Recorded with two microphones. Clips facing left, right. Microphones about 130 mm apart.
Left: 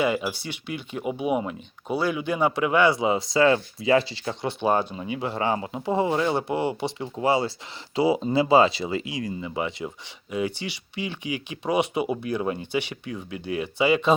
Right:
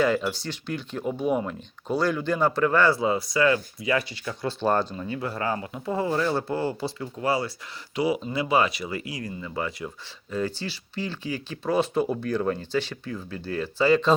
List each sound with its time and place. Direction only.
0.0 s speech: 10° left (ahead or behind); by 4.5 s 25° left (ahead or behind)
4.6 s speech: 10° left (ahead or behind)